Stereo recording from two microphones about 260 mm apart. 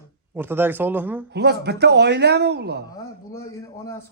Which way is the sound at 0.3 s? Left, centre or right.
Centre.